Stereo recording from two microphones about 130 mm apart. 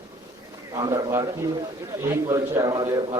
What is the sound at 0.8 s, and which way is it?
A man's voice, 25° right (ahead or behind).